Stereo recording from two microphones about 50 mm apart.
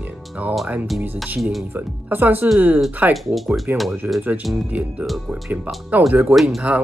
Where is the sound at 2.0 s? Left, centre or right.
Right.